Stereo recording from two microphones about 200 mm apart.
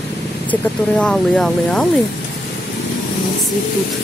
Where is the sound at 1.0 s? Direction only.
5° left (ahead or behind).